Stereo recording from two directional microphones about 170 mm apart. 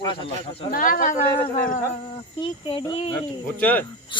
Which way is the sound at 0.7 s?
55° left (ahead or behind).